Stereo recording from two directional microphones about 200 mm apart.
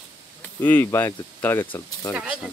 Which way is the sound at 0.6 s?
10° left (ahead or behind).